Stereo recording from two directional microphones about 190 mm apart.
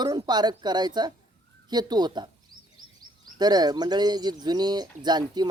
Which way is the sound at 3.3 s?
20° right (ahead or behind).